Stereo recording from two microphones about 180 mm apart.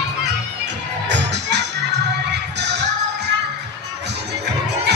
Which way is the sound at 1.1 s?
70° right (ahead or behind).